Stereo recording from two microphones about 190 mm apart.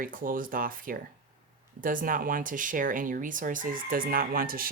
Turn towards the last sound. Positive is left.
turn(degrees=-50)  # may be behind; listen again after turning